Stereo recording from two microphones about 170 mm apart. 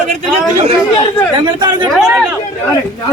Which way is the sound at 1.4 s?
25° right (ahead or behind).